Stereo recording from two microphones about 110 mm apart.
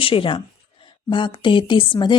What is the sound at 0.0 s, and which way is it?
A woman's voice, 55° left (ahead or behind).